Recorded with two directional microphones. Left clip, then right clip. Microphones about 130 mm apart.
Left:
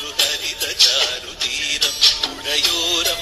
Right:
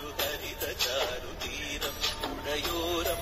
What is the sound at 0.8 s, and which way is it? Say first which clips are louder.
Music: left 15 dB; 5° left (ahead or behind).